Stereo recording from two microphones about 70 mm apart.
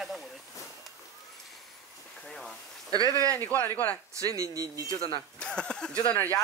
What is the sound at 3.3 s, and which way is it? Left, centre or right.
Speech, left.